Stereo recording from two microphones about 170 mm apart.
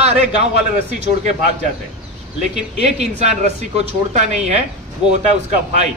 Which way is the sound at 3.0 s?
40° right (ahead or behind).